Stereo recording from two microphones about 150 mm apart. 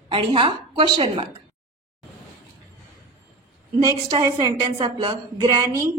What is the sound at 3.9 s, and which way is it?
A woman's voice, 30° right (ahead or behind).